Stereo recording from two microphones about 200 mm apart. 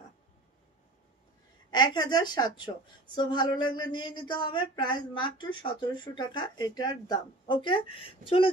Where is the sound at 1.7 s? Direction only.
20° left (ahead or behind).